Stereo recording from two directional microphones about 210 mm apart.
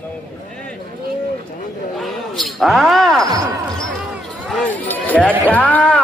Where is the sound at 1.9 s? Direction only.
Centre (ahead or behind).